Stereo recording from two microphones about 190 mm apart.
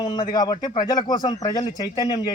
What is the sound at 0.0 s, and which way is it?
A man's voice, 25° left (ahead or behind).